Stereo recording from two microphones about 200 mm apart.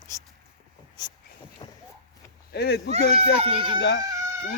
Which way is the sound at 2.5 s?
55° left (ahead or behind).